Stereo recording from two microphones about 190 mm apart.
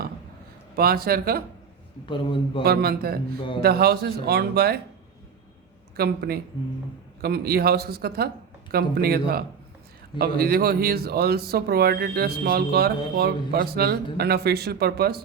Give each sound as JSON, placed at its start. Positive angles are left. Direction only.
{"t": 0.8, "sound": "speech", "side_deg": -55}
{"t": 2.0, "sound": "a man's voice", "side_deg": 25}
{"t": 2.6, "sound": "speech", "side_deg": -55}
{"t": 6.0, "sound": "speech", "side_deg": -55}